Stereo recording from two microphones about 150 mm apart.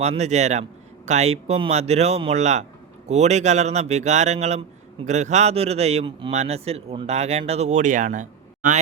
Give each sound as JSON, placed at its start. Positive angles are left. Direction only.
{"t": 0.0, "sound": "speech", "side_deg": -45}